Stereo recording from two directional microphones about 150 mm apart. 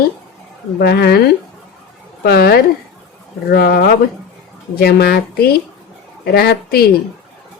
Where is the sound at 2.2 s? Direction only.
90° left.